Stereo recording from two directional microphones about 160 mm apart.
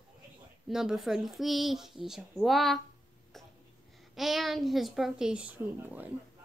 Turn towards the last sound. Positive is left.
turn(degrees=-10)  # may be behind; listen again after turning